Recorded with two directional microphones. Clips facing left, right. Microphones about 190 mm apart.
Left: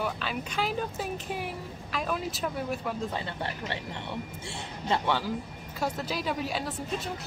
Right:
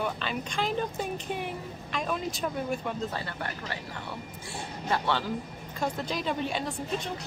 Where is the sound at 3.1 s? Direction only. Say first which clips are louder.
Left 1 dB; 25° left (ahead or behind).